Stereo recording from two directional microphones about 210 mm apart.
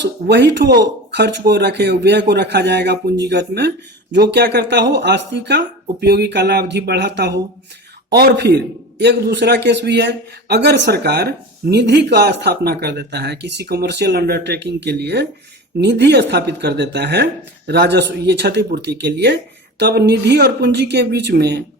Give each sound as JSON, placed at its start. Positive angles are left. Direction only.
{"t": 0.0, "sound": "a man's voice", "side_deg": -55}